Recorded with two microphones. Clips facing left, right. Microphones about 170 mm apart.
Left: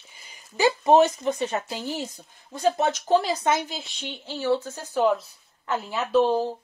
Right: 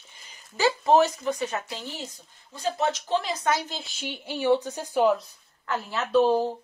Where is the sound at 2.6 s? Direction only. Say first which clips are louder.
Left 4 dB; 45° left (ahead or behind); by 3.6 s 30° left (ahead or behind).